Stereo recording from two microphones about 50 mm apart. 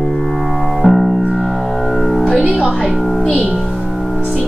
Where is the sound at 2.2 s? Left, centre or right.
Right.